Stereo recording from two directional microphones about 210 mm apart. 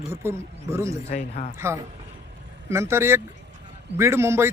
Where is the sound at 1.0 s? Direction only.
35° left (ahead or behind).